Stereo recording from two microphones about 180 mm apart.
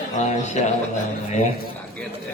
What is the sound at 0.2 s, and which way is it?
Speech, 40° left (ahead or behind).